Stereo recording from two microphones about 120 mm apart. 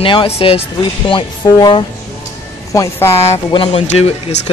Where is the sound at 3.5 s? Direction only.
50° left (ahead or behind).